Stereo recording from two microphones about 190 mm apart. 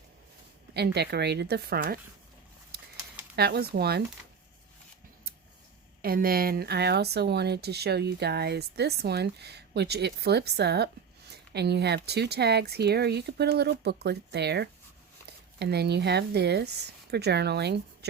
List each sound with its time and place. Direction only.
0.7 s speech: 60° right (ahead or behind)
3.3 s speech: 60° right (ahead or behind)
6.0 s speech: 50° right (ahead or behind)